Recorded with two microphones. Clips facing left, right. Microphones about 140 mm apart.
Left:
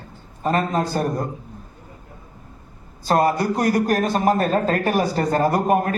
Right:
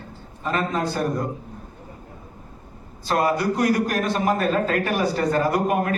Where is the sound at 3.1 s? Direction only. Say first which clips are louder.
Left 3 dB; 40° left (ahead or behind).